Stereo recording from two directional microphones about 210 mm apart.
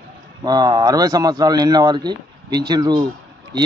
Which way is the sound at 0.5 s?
20° right (ahead or behind).